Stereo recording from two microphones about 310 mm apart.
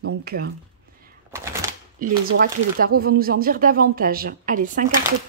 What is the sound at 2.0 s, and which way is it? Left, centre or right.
Speech, right.